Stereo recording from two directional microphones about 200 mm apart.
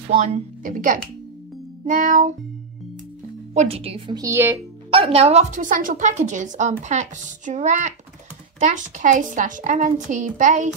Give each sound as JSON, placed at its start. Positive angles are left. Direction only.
{"t": 0.2, "sound": "a woman's voice", "side_deg": -40}
{"t": 3.5, "sound": "speech", "side_deg": -30}
{"t": 4.2, "sound": "speech", "side_deg": -10}
{"t": 4.9, "sound": "a woman's voice", "side_deg": -30}